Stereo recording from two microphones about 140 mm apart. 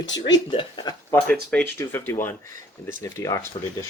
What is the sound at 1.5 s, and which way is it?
Speech, 15° left (ahead or behind).